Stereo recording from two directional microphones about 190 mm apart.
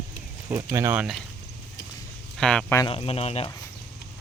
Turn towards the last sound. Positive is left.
turn(degrees=30)  # may be behind; listen again after turning